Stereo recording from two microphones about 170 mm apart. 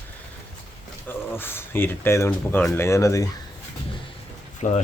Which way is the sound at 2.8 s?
15° left (ahead or behind).